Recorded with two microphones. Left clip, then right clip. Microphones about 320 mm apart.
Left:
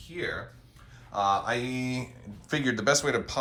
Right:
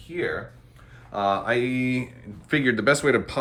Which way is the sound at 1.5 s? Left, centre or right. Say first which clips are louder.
Right 7 dB; left.